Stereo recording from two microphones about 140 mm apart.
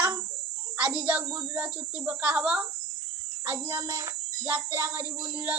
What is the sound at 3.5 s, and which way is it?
A child's voice, 20° right (ahead or behind).